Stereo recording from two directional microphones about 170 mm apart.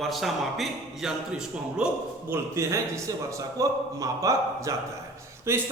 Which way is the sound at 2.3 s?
15° right (ahead or behind).